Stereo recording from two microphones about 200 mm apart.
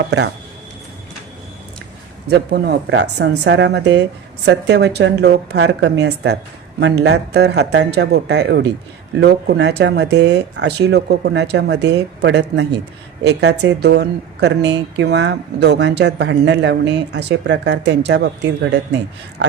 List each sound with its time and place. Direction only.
2.3 s speech: 55° right (ahead or behind)